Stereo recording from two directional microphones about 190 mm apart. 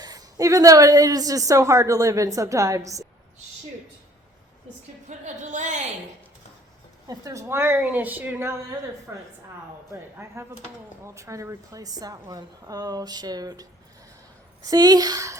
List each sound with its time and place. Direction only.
0.0 s a woman's voice: 20° right (ahead or behind)
5.0 s a woman's voice: 40° right (ahead or behind)
7.1 s a woman's voice: 15° right (ahead or behind)